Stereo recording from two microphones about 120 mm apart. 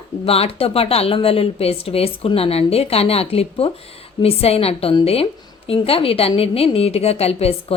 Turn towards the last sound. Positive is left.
turn(degrees=55)  # may be behind; listen again after turning